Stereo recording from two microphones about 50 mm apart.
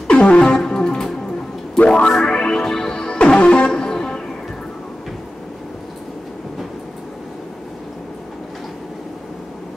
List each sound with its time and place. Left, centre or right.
0.1 s music: centre